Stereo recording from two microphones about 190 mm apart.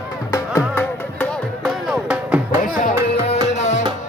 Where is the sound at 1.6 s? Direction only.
5° right (ahead or behind).